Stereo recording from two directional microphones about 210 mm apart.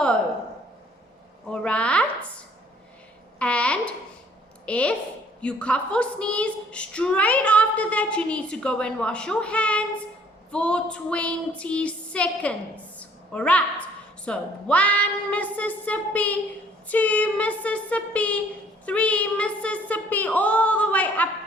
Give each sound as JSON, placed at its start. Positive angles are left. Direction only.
{"t": 1.6, "sound": "speech", "side_deg": 5}
{"t": 3.3, "sound": "female singing", "side_deg": 5}
{"t": 16.9, "sound": "speech", "side_deg": 5}